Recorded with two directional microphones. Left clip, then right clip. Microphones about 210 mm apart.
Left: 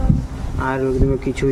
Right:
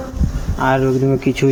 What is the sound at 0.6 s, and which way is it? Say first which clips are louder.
Speech: right 4 dB; 15° right (ahead or behind).